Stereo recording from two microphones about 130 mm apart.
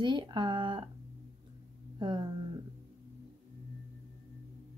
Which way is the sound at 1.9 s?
35° right (ahead or behind).